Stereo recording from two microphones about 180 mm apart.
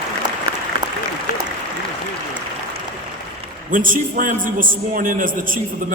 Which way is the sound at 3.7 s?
50° right (ahead or behind).